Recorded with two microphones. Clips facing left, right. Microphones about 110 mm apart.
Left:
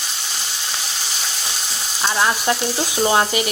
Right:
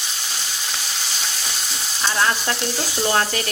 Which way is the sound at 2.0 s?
15° left (ahead or behind).